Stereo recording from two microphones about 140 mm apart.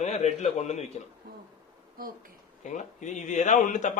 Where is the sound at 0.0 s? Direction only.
55° left (ahead or behind).